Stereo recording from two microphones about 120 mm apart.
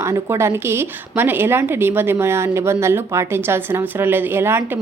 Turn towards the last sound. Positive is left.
turn(degrees=-20)  # may be behind; listen again after turning